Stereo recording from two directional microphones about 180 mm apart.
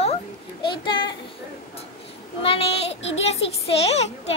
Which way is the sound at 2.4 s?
35° left (ahead or behind).